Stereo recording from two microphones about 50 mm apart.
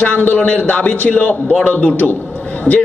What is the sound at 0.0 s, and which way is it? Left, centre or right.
A man's voice, left.